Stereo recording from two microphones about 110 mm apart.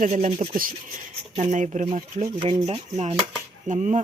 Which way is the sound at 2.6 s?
75° right (ahead or behind).